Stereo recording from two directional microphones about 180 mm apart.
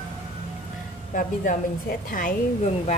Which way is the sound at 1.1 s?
50° left (ahead or behind).